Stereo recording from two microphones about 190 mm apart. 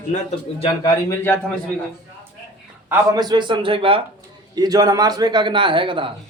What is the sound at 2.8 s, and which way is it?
A man's voice, 20° right (ahead or behind).